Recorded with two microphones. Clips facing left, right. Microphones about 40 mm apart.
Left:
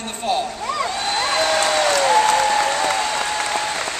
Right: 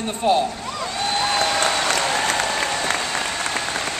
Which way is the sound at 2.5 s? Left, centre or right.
Left.